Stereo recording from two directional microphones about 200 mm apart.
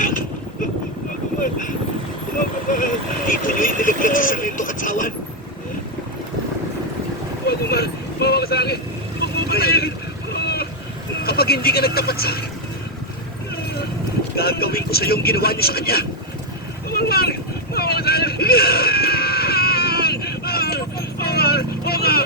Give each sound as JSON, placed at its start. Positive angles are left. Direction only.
{"t": 1.4, "sound": "vehicle", "side_deg": 40}
{"t": 2.7, "sound": "speech", "side_deg": 40}
{"t": 7.4, "sound": "vehicle", "side_deg": 50}
{"t": 10.3, "sound": "a sound", "side_deg": 55}
{"t": 11.2, "sound": "speech", "side_deg": 50}
{"t": 14.3, "sound": "speech", "side_deg": 50}
{"t": 17.7, "sound": "a sound", "side_deg": 50}